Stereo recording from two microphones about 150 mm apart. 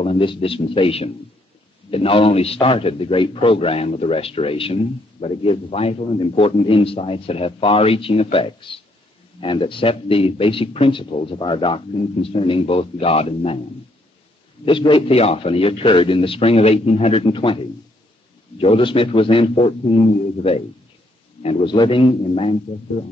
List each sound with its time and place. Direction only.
0.0 s a man's voice: 35° left (ahead or behind)
14.6 s a man's voice: 35° left (ahead or behind)
18.6 s a man's voice: 40° left (ahead or behind)
21.6 s a man's voice: 35° left (ahead or behind)